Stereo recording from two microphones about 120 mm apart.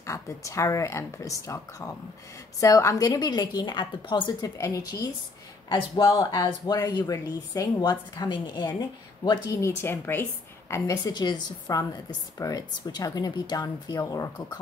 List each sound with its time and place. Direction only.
0.0 s a woman's voice: 25° left (ahead or behind)
5.7 s a woman's voice: 40° left (ahead or behind)
9.5 s speech: 25° left (ahead or behind)
10.7 s a woman's voice: 30° left (ahead or behind)